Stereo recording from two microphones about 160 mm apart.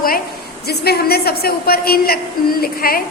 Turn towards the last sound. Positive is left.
turn(degrees=65)  # may be behind; listen again after turning